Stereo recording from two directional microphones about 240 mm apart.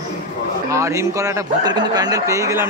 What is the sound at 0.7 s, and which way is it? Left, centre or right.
Speech, centre.